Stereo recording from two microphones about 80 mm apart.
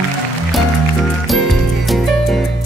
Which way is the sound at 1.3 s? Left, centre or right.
Centre.